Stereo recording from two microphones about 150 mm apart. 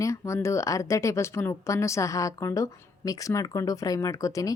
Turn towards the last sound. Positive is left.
turn(degrees=20)  # may be behind; listen again after turning